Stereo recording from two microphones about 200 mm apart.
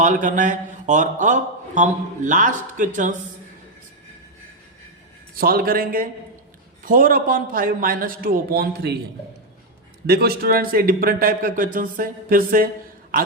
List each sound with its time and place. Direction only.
0.0 s a man's voice: 40° right (ahead or behind)
5.3 s a man's voice: 45° right (ahead or behind)
10.1 s a man's voice: 50° right (ahead or behind)